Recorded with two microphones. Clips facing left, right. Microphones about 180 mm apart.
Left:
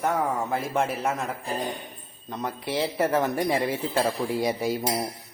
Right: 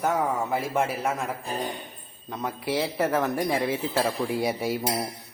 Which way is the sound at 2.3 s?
Centre (ahead or behind).